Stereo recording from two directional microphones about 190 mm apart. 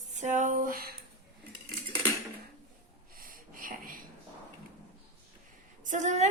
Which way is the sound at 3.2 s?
50° right (ahead or behind).